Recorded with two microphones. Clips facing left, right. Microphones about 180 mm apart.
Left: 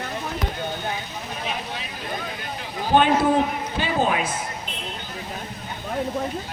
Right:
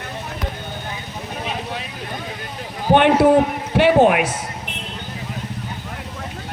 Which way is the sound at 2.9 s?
65° right (ahead or behind).